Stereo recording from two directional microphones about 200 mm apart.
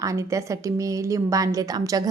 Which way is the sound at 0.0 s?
15° right (ahead or behind).